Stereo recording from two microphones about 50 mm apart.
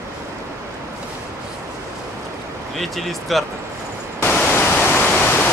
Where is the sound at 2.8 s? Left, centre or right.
Centre.